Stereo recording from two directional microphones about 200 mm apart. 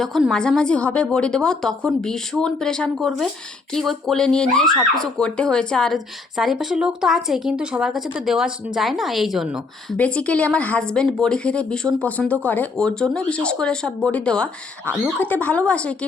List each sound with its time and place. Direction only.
0.0 s speech: centre (ahead or behind)